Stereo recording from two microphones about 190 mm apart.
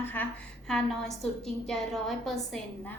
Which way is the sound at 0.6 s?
Centre (ahead or behind).